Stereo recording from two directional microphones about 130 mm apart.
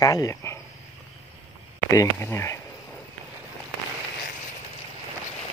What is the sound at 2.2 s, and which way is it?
Speech, 20° left (ahead or behind).